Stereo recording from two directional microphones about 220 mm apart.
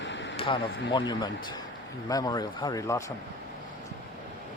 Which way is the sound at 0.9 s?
20° left (ahead or behind).